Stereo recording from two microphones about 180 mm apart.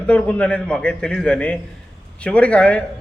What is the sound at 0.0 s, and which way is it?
A man's voice, 5° left (ahead or behind).